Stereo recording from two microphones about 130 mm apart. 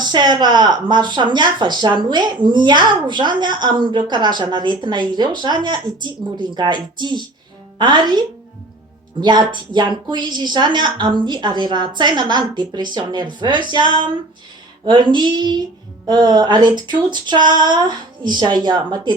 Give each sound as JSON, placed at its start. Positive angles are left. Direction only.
{"t": 0.0, "sound": "speech", "side_deg": -35}
{"t": 9.2, "sound": "speech", "side_deg": -35}